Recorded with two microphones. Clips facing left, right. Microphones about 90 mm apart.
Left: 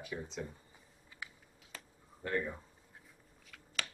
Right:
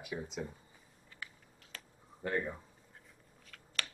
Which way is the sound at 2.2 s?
20° right (ahead or behind).